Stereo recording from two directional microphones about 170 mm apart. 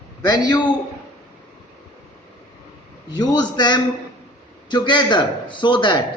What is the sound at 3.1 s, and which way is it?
A man's voice, 25° left (ahead or behind).